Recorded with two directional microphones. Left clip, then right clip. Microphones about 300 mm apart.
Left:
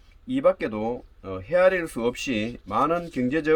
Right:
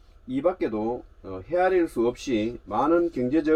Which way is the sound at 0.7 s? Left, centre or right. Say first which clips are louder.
Even; left.